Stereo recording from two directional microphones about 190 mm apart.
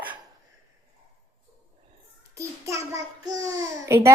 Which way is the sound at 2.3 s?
15° right (ahead or behind).